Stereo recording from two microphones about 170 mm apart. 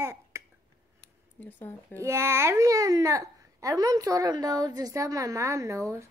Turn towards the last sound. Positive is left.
turn(degrees=-15)  # may be behind; listen again after turning